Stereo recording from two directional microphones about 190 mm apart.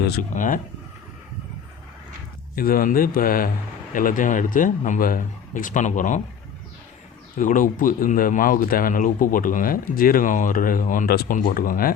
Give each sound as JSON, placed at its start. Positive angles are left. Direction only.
{"t": 0.0, "sound": "speech", "side_deg": 50}
{"t": 2.6, "sound": "speech", "side_deg": 50}
{"t": 7.3, "sound": "speech", "side_deg": 45}